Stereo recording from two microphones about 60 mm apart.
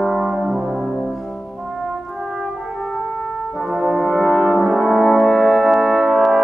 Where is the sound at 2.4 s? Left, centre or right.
Centre.